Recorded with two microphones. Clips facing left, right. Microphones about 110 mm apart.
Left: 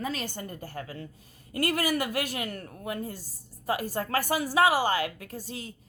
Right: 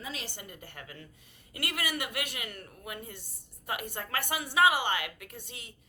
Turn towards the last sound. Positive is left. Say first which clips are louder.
# left 8 dB
turn(degrees=35)  # may be behind; listen again after turning